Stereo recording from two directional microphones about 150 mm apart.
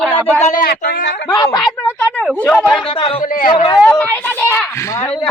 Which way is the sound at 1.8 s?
10° left (ahead or behind).